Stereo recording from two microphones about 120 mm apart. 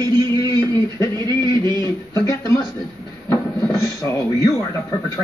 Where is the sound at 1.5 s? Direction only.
35° right (ahead or behind).